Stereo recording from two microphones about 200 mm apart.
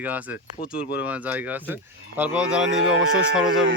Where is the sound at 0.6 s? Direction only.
50° left (ahead or behind).